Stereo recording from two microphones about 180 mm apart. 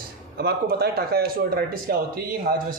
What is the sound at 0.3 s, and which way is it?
Speech, 60° right (ahead or behind).